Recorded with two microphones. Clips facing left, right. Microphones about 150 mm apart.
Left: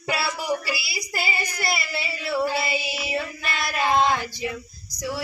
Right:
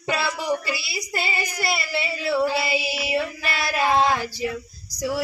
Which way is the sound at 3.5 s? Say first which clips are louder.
Right 1 dB; 35° right (ahead or behind).